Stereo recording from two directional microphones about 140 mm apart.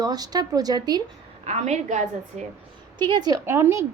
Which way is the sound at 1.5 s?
55° right (ahead or behind).